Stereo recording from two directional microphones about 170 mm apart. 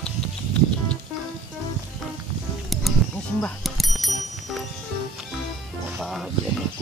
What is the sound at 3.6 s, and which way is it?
Bicycle bell, centre (ahead or behind).